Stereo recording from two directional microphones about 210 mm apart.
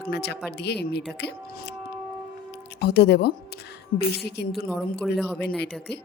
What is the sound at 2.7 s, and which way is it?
Speech, 50° left (ahead or behind).